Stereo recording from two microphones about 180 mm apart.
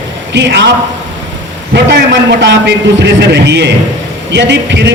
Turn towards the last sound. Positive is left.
turn(degrees=-75)  # may be behind; listen again after turning